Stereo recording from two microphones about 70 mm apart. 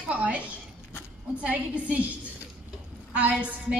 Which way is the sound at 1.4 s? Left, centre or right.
Centre.